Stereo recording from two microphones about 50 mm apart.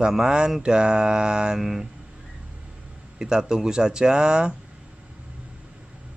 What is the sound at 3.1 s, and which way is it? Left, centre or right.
Speech, centre.